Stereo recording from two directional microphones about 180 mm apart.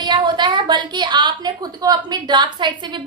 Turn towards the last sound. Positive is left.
turn(degrees=-25)  # may be behind; listen again after turning